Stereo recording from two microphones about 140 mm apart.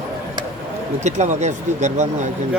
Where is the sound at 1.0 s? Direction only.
55° right (ahead or behind).